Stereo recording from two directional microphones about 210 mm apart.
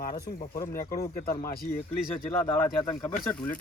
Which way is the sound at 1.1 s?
45° left (ahead or behind).